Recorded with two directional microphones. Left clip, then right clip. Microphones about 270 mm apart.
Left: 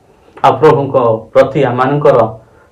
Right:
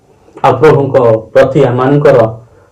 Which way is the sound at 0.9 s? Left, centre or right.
Left.